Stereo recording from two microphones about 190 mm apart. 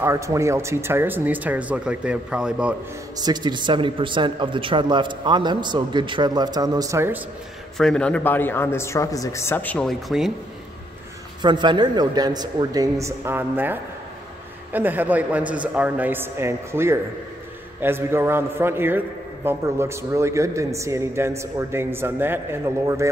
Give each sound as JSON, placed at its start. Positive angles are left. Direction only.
{"t": 0.0, "sound": "a man's voice", "side_deg": -15}
{"t": 3.2, "sound": "speech", "side_deg": -20}
{"t": 7.7, "sound": "speech", "side_deg": 5}
{"t": 11.4, "sound": "a man's voice", "side_deg": -25}